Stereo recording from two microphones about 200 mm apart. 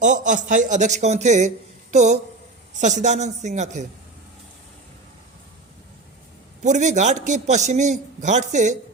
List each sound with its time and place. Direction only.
0.0 s a man's voice: 40° right (ahead or behind)
6.6 s a man's voice: 35° right (ahead or behind)